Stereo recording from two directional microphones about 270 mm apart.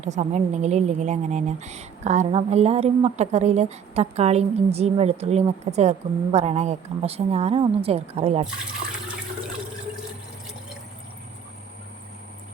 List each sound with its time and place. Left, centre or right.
0.0 s a woman's voice: right